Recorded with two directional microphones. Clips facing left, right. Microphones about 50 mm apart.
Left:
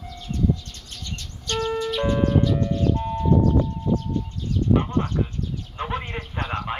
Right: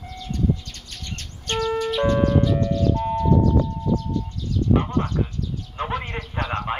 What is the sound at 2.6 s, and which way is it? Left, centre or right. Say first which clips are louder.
Ice cream truck: right 1 dB; left.